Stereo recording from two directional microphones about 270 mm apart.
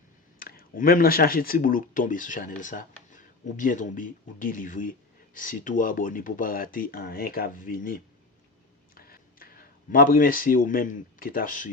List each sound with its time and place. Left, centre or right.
0.3 s speech: left
9.0 s speech: left